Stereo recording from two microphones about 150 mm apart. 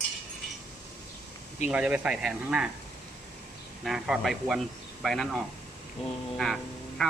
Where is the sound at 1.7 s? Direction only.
10° right (ahead or behind).